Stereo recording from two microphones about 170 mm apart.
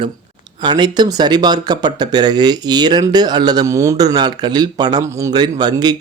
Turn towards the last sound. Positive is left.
turn(degrees=-25)  # may be behind; listen again after turning